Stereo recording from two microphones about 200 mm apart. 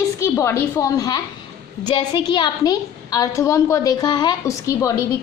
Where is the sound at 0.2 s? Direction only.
15° left (ahead or behind).